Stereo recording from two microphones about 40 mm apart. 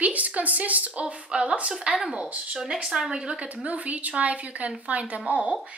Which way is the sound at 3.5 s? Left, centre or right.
Right.